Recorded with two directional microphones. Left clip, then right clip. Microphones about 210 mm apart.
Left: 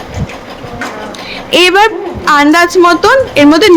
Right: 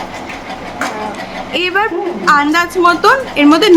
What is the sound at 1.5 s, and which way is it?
A woman's voice, 35° left (ahead or behind).